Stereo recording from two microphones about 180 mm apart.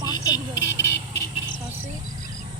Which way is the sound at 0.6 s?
80° left.